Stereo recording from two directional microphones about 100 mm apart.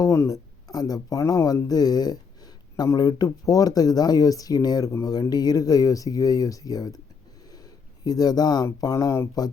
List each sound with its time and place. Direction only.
0.0 s speech: 35° left (ahead or behind)
7.5 s a sound: 40° left (ahead or behind)
8.8 s speech: 35° left (ahead or behind)